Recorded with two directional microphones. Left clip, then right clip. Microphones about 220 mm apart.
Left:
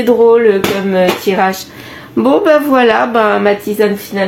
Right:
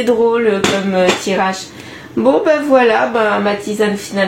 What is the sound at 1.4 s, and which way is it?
Speech, 45° left (ahead or behind).